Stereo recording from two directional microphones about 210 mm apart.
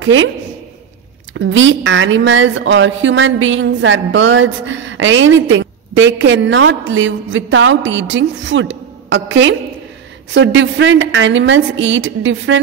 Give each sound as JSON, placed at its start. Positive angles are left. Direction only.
{"t": 0.0, "sound": "a woman's voice", "side_deg": -65}
{"t": 1.3, "sound": "a woman's voice", "side_deg": -65}